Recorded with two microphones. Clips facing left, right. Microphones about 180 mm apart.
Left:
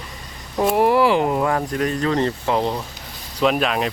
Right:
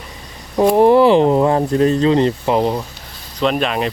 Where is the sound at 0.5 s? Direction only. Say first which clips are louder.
Right 6 dB; 25° right (ahead or behind).